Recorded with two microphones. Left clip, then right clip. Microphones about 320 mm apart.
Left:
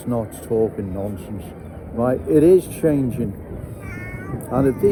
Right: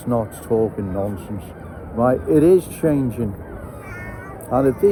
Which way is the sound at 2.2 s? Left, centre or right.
Centre.